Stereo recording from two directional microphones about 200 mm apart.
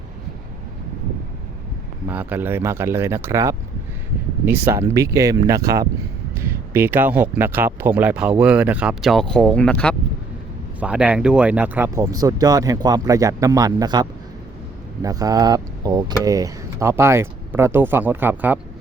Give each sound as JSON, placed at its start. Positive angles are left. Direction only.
{"t": 2.0, "sound": "speech", "side_deg": -10}
{"t": 10.8, "sound": "speech", "side_deg": -5}